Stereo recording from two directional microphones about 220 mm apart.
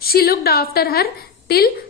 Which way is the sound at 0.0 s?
45° left (ahead or behind).